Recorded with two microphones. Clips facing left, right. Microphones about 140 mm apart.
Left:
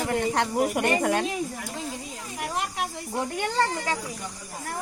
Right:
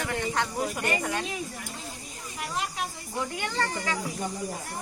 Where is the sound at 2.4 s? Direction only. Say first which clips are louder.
Left 3 dB; 55° left (ahead or behind).